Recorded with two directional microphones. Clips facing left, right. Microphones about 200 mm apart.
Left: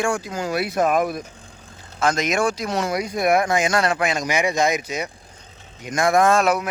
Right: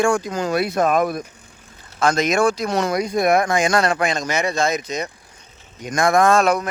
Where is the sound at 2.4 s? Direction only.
55° right (ahead or behind).